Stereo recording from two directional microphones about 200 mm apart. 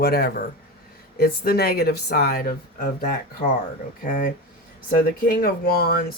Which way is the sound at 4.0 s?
40° left (ahead or behind).